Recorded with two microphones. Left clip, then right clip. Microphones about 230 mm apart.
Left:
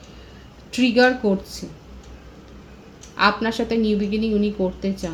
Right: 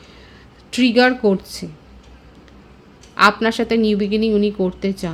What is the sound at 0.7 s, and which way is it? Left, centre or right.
Speech, right.